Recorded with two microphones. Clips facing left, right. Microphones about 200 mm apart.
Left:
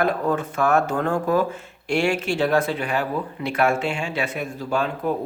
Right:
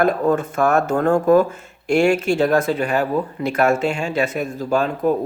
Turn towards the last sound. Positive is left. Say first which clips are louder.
# right 5 dB
turn(degrees=-40)  # may be behind; listen again after turning